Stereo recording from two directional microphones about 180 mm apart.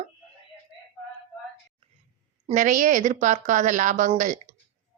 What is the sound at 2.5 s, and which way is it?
Speech, 45° right (ahead or behind).